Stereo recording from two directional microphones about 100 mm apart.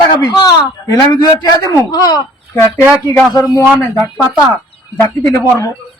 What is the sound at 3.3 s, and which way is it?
Speech, 35° left (ahead or behind).